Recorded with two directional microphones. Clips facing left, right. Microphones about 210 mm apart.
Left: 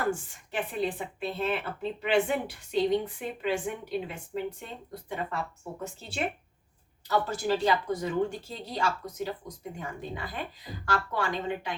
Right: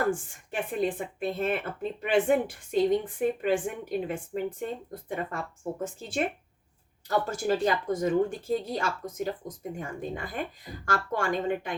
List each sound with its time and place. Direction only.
0.1 s speech: 50° right (ahead or behind)
7.3 s speech: 45° right (ahead or behind)